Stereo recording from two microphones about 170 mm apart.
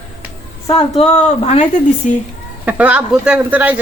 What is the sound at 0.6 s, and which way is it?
A woman's voice, 35° left (ahead or behind).